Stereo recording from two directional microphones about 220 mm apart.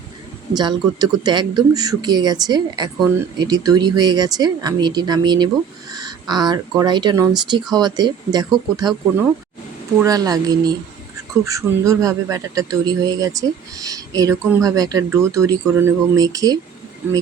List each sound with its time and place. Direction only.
0.5 s a man's voice: 20° right (ahead or behind)
10.0 s a man's voice: 15° right (ahead or behind)